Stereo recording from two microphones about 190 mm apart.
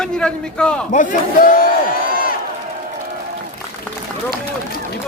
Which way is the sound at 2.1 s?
50° left (ahead or behind).